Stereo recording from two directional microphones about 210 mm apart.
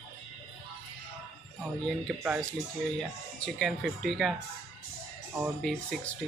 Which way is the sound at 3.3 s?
Centre (ahead or behind).